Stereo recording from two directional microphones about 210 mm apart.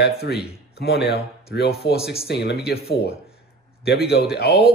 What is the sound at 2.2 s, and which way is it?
Speech, 50° left (ahead or behind).